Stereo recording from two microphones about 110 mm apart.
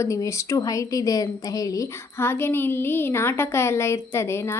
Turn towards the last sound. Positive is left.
turn(degrees=25)  # may be behind; listen again after turning